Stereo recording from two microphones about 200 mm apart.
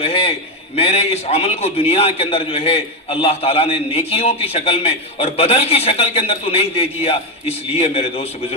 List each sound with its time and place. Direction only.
0.0 s a man's voice: 30° left (ahead or behind)